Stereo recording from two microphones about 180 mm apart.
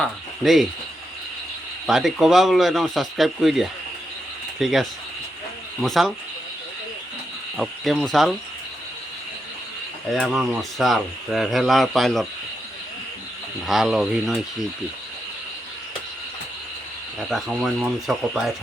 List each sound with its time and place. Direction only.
0.0 s speech: centre (ahead or behind)
1.9 s speech: centre (ahead or behind)
7.5 s speech: centre (ahead or behind)
10.1 s speech: centre (ahead or behind)
13.7 s speech: centre (ahead or behind)
17.2 s speech: centre (ahead or behind)